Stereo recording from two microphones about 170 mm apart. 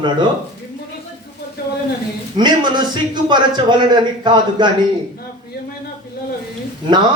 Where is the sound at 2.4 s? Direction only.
25° right (ahead or behind).